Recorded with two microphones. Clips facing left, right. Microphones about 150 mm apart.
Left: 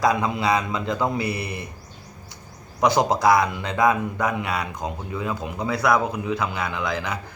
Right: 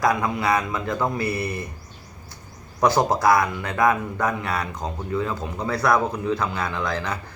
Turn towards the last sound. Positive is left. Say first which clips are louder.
# even
turn(degrees=10)  # may be behind; listen again after turning